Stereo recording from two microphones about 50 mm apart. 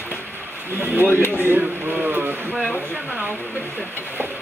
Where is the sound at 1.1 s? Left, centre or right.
Left.